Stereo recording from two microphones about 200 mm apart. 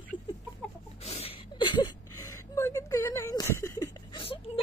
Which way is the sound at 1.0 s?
30° left (ahead or behind).